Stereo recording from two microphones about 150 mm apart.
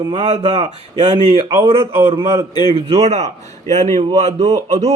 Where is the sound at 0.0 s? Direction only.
35° right (ahead or behind).